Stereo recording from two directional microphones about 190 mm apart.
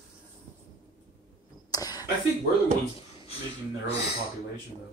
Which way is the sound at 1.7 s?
20° left (ahead or behind).